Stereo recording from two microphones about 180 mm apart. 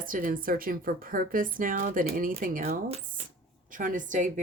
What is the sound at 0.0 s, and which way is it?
Speech, 50° right (ahead or behind).